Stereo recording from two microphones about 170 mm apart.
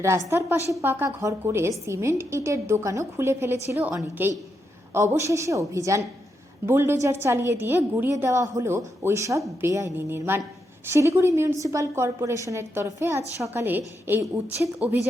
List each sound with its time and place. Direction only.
0.3 s a woman's voice: 15° right (ahead or behind)